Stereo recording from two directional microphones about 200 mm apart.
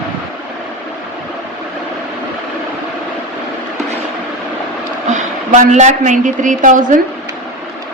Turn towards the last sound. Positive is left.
turn(degrees=-40)  # may be behind; listen again after turning